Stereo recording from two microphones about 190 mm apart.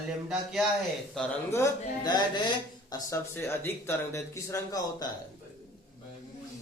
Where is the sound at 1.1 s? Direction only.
10° left (ahead or behind).